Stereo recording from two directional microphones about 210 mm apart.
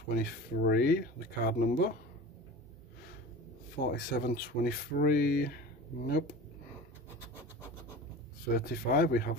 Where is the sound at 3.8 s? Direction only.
45° left (ahead or behind).